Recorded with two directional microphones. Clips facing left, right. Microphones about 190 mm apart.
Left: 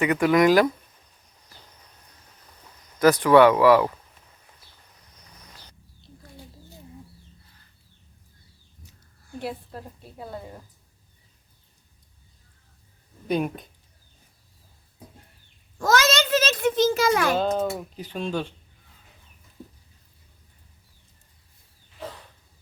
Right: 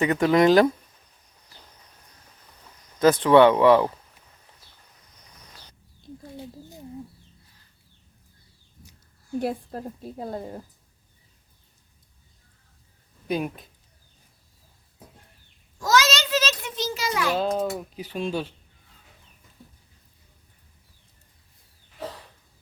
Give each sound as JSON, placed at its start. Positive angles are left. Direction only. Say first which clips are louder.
{"t": 0.0, "sound": "speech", "louder": "even", "side_deg": -25}
{"t": 3.0, "sound": "speech", "louder": "even", "side_deg": -25}
{"t": 9.4, "sound": "a woman's voice", "louder": "right 4 dB", "side_deg": -45}
{"t": 13.2, "sound": "a child's voice", "louder": "left 2 dB", "side_deg": 0}
{"t": 15.8, "sound": "a sound", "louder": "left 1 dB", "side_deg": 55}
{"t": 17.3, "sound": "a child's voice", "louder": "left 1 dB", "side_deg": 0}
{"t": 17.9, "sound": "speech", "louder": "even", "side_deg": -10}